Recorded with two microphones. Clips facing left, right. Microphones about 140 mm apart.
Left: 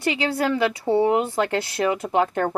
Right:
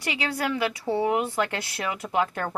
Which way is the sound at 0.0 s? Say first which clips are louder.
Left 6 dB; 25° left (ahead or behind).